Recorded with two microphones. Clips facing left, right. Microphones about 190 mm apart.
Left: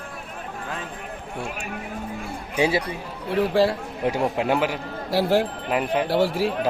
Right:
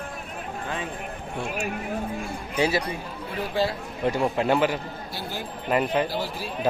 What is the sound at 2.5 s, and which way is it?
Speech, 20° left (ahead or behind).